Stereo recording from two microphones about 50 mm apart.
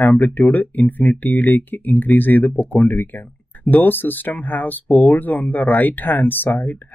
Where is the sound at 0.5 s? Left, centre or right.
Left.